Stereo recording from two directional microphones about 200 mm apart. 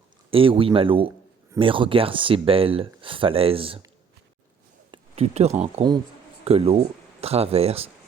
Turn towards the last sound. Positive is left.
turn(degrees=-30)  # may be behind; listen again after turning